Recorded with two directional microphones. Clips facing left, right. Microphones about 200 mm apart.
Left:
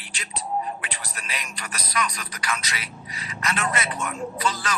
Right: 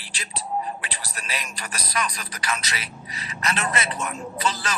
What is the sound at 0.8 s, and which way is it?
Speech, 35° right (ahead or behind).